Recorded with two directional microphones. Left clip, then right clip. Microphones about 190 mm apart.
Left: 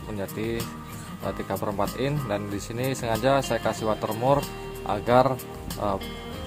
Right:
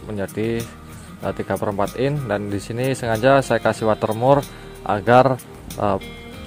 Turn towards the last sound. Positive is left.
turn(degrees=-30)  # may be behind; listen again after turning